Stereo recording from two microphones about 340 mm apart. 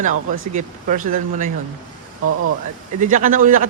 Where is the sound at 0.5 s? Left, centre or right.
Right.